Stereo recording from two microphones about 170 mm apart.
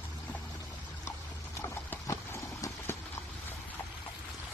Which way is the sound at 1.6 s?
15° left (ahead or behind).